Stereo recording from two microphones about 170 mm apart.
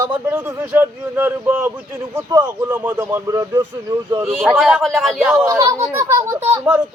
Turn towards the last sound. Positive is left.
turn(degrees=-10)  # may be behind; listen again after turning